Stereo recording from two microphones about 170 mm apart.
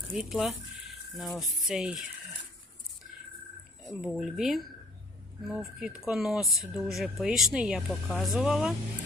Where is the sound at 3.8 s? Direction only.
Centre (ahead or behind).